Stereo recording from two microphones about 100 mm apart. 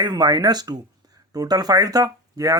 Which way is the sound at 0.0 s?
45° right (ahead or behind).